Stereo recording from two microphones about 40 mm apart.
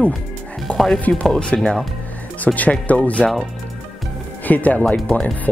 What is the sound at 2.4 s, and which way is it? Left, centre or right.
Speech, left.